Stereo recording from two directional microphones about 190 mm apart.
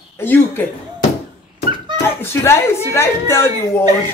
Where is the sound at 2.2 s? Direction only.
15° left (ahead or behind).